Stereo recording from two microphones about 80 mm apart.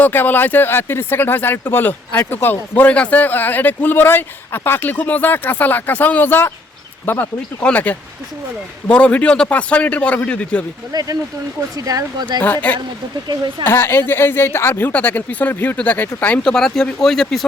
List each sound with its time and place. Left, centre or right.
0.0 s a man's voice: left
10.9 s speech: right
11.8 s speech: right
12.4 s speech: centre
13.2 s speech: right
13.7 s speech: left
16.4 s a man's voice: centre